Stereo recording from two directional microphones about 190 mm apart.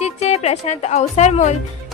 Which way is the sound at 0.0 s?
35° left (ahead or behind).